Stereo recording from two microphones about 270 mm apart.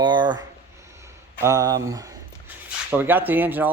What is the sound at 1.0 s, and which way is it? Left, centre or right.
Speech, centre.